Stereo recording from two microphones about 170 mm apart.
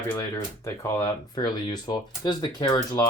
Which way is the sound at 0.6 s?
20° left (ahead or behind).